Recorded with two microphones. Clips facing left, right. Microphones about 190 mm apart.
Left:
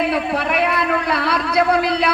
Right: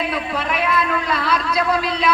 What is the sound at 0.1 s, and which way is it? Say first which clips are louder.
A man's voice: left 4 dB; 65° left (ahead or behind).